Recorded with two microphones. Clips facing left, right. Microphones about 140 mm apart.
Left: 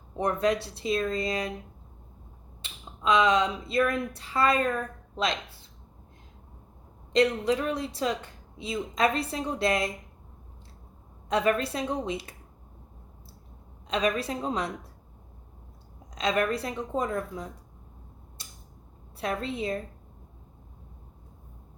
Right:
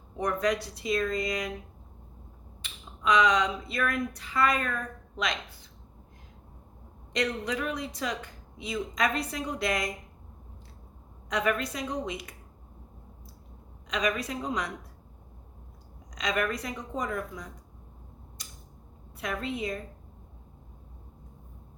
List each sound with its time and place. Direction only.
0.2 s speech: 25° left (ahead or behind)
2.6 s a sound: 25° left (ahead or behind)
7.1 s speech: 30° left (ahead or behind)
11.3 s speech: 30° left (ahead or behind)
13.8 s speech: 30° left (ahead or behind)
16.1 s speech: 30° left (ahead or behind)
19.2 s a woman's voice: 30° left (ahead or behind)